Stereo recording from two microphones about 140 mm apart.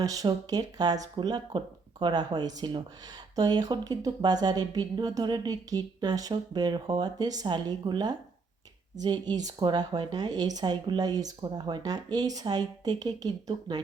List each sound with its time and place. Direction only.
0.0 s speech: 25° right (ahead or behind)